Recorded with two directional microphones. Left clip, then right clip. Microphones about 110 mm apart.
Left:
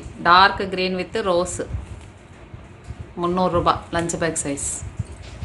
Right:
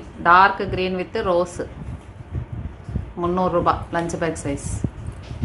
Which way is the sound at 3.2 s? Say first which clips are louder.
Even; 25° left (ahead or behind).